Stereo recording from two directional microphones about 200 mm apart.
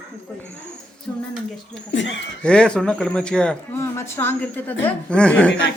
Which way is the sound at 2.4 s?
5° left (ahead or behind).